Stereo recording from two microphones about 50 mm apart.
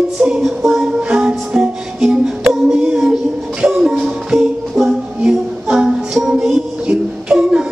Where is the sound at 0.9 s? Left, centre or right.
Centre.